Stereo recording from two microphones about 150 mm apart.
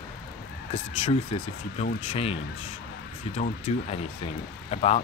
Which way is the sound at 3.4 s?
45° left (ahead or behind).